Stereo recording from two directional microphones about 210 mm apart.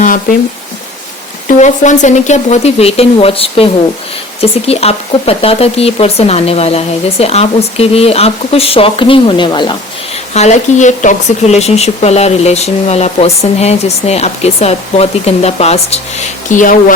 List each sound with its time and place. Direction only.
1.5 s speech: 35° left (ahead or behind)
10.3 s speech: 35° left (ahead or behind)